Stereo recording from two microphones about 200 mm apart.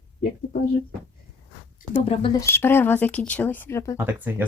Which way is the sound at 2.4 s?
10° left (ahead or behind).